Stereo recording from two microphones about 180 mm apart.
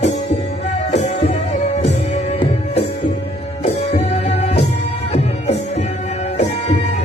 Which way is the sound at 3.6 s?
35° left (ahead or behind).